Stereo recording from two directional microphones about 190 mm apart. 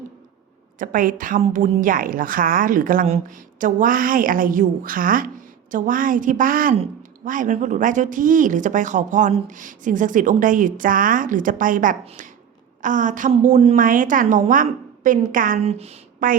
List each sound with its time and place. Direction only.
0.8 s speech: 45° right (ahead or behind)
15.6 s speech: 35° right (ahead or behind)